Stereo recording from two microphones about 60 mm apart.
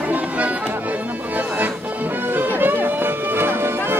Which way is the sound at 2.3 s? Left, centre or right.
Right.